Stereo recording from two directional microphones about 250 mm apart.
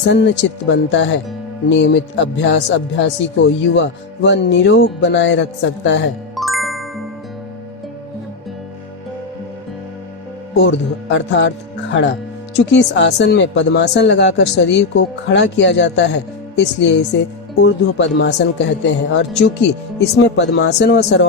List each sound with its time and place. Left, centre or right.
0.0 s speech: left
6.3 s music: centre
10.6 s speech: left
12.5 s speech: left